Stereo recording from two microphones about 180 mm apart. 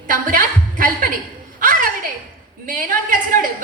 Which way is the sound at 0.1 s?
50° right (ahead or behind).